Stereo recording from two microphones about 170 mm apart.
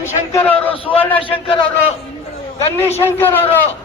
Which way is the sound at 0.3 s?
10° left (ahead or behind).